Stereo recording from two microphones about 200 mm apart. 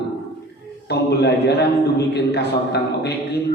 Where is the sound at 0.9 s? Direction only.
55° left (ahead or behind).